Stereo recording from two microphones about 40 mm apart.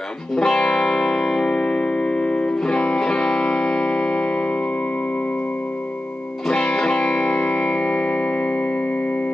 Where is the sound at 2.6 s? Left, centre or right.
Left.